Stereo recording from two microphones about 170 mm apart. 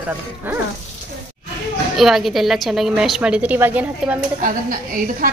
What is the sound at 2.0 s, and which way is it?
A woman's voice, centre (ahead or behind).